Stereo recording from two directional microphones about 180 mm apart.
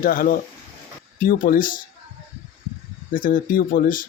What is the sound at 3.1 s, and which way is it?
Speech, 50° left (ahead or behind).